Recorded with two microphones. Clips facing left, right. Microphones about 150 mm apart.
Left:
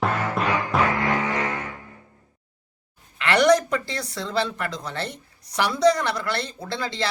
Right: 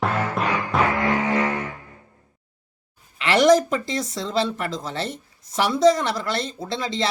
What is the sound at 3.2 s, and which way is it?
A woman's voice, 20° right (ahead or behind).